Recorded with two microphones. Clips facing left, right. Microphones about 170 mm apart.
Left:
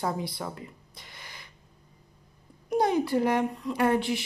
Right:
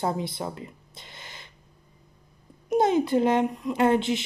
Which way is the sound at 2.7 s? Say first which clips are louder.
Right 3 dB; 20° right (ahead or behind).